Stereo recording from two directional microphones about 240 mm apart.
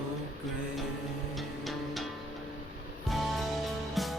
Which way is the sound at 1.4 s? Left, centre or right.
Centre.